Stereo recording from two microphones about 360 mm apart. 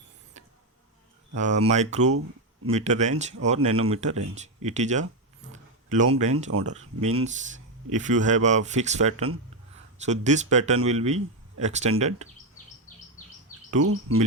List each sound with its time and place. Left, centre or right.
1.4 s speech: centre
5.5 s a sound: centre
6.5 s speech: right
7.2 s speech: centre
13.7 s speech: right